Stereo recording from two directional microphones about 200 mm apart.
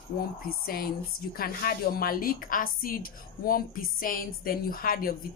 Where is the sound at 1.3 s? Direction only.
50° left (ahead or behind).